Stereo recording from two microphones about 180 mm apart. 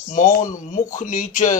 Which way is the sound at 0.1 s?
45° left (ahead or behind).